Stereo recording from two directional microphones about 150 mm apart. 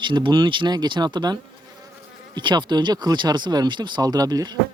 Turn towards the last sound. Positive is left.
turn(degrees=-25)  # may be behind; listen again after turning